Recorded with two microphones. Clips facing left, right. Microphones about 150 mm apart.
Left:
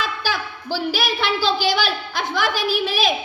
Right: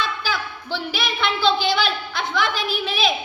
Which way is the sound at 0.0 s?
40° left (ahead or behind).